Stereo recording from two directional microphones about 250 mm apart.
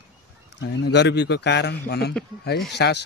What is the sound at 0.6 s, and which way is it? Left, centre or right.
A man's voice, left.